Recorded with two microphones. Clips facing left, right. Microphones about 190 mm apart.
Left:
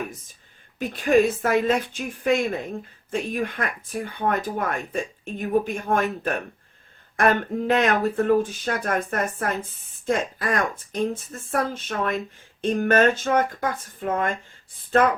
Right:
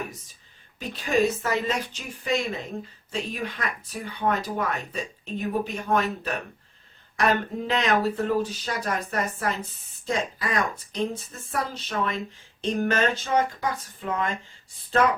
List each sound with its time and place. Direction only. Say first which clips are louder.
0.8 s speech: left 5 dB; 55° left (ahead or behind)